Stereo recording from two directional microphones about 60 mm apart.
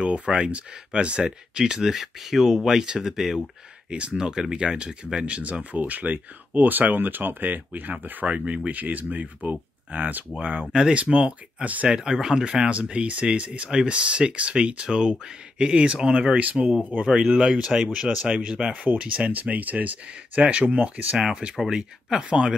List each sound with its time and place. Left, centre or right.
0.0 s speech: centre
10.7 s speech: centre
11.9 s speech: centre